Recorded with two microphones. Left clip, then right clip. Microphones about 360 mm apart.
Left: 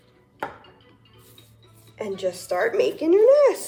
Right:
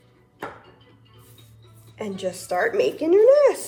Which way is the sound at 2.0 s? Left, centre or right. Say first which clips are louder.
Left 2 dB; left.